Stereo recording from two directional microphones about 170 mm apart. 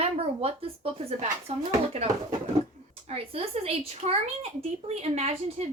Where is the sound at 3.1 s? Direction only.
35° right (ahead or behind).